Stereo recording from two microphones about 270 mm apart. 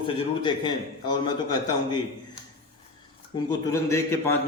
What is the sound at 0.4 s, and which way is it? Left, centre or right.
Speech, centre.